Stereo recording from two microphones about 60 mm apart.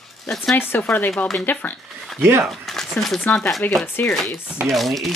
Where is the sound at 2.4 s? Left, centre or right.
Centre.